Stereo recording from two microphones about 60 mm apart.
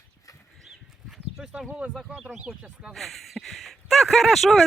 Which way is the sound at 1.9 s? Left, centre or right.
Centre.